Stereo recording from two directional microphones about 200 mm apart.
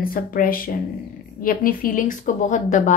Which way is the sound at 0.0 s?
45° left (ahead or behind).